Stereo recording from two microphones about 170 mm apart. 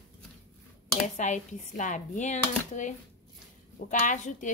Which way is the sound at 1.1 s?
45° left (ahead or behind).